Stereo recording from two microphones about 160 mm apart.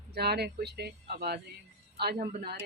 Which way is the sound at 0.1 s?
90° right.